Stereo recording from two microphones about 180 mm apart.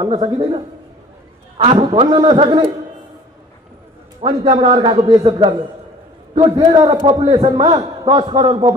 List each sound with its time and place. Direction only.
0.0 s a man's voice: 25° right (ahead or behind)
1.6 s a man's voice: 30° right (ahead or behind)
4.2 s a man's voice: 30° right (ahead or behind)